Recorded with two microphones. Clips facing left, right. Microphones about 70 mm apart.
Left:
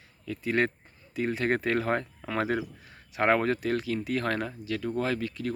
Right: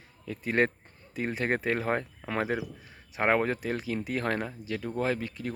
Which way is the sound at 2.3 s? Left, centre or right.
Centre.